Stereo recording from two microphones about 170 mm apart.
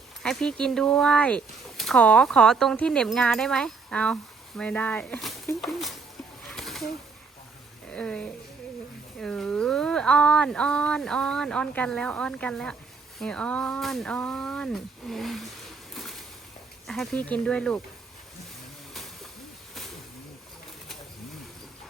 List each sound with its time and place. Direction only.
0.2 s speech: 5° left (ahead or behind)
6.5 s bird: centre (ahead or behind)
7.9 s speech: 5° left (ahead or behind)
16.0 s a sound: centre (ahead or behind)
16.8 s speech: centre (ahead or behind)